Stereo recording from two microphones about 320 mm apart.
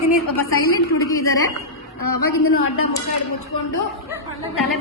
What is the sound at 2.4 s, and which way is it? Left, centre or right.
Speech, left.